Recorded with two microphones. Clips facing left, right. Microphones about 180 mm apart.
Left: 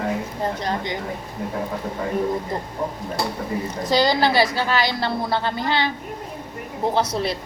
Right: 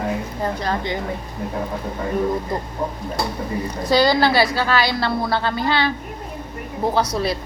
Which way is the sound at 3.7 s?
20° left (ahead or behind).